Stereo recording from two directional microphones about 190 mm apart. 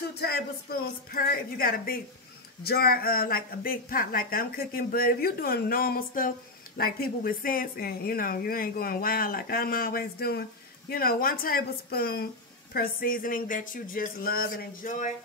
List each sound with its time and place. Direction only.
0.1 s speech: 55° left (ahead or behind)